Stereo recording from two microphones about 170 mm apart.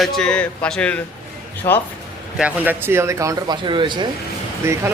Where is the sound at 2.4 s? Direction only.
10° right (ahead or behind); by 4.1 s 25° right (ahead or behind).